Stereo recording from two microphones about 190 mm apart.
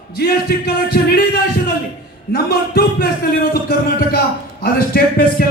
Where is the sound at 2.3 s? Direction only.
50° left (ahead or behind).